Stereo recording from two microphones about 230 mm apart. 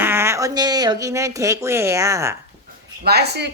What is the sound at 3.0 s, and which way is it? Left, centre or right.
Speech, right.